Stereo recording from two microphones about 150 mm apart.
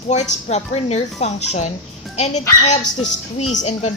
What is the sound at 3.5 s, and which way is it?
Speech, 50° left (ahead or behind).